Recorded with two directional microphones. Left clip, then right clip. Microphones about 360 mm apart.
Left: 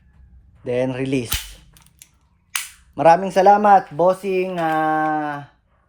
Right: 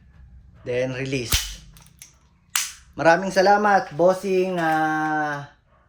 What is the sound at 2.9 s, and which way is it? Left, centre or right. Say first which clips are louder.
Speech: left 4 dB; centre.